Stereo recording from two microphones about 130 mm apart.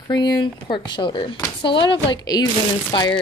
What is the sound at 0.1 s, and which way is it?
Speech, 30° left (ahead or behind).